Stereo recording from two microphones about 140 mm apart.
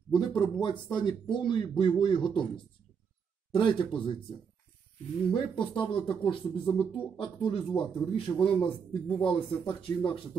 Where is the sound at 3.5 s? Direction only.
35° left (ahead or behind).